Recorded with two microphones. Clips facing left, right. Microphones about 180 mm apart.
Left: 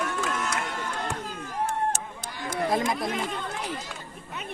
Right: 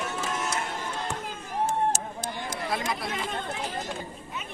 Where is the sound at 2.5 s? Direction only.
50° left (ahead or behind).